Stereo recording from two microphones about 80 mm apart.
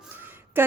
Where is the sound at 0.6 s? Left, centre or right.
Right.